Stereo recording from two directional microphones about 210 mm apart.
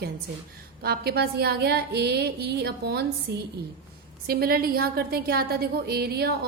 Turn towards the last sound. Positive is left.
turn(degrees=-50)  # may be behind; listen again after turning